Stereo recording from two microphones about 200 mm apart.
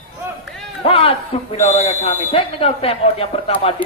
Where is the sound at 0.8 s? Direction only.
30° left (ahead or behind).